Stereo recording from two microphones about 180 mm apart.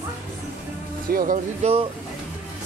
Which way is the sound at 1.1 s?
50° right (ahead or behind).